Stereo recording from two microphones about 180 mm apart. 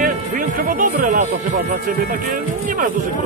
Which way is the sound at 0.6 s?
50° right (ahead or behind).